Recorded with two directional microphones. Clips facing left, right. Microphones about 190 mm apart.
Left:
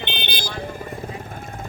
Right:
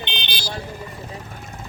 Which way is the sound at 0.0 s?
55° left (ahead or behind).